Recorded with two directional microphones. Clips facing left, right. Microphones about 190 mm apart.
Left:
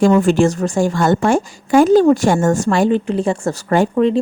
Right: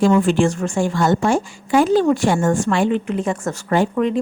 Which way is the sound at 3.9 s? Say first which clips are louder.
Left 5 dB; 30° left (ahead or behind).